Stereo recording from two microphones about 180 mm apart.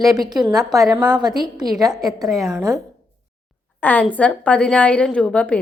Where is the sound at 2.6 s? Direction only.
20° right (ahead or behind).